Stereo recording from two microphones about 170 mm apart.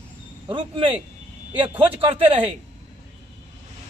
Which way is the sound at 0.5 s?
30° right (ahead or behind).